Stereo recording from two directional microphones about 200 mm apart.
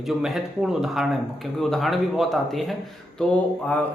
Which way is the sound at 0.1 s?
Centre (ahead or behind).